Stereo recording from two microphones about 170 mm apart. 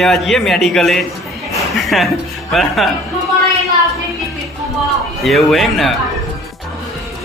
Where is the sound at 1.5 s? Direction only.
Centre (ahead or behind).